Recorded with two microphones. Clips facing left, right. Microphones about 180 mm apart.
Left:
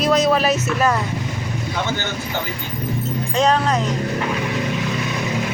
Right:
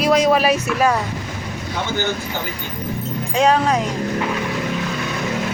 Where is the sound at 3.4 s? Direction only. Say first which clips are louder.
Right 2 dB; 10° right (ahead or behind).